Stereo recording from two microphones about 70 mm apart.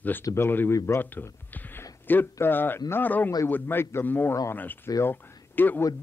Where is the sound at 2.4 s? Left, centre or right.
Left.